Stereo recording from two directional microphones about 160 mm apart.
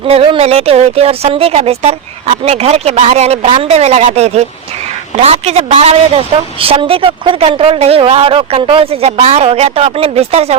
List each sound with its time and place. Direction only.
0.1 s a woman's voice: 40° right (ahead or behind)